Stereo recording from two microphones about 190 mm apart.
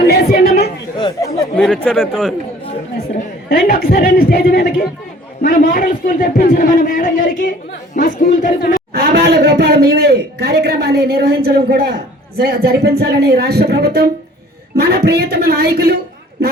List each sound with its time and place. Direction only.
0.4 s chatter: 35° left (ahead or behind)
0.9 s chatter: 20° left (ahead or behind)
1.5 s speech: 5° left (ahead or behind)
3.5 s a man's voice: 50° left (ahead or behind)
8.9 s a man's voice: 55° right (ahead or behind)